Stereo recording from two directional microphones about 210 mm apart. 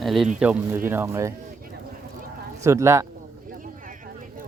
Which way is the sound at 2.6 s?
15° right (ahead or behind).